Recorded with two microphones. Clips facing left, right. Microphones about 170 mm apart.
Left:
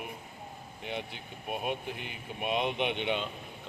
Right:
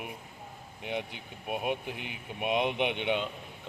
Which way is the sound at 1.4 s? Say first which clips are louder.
Right 2 dB; 10° right (ahead or behind).